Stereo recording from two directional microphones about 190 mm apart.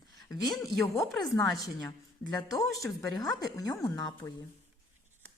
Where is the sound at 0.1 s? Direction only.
20° left (ahead or behind).